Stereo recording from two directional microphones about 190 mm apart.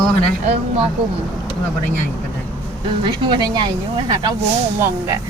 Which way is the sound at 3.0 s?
25° right (ahead or behind).